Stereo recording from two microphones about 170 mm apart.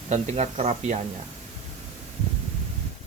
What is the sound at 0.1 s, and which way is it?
Speech, 40° right (ahead or behind).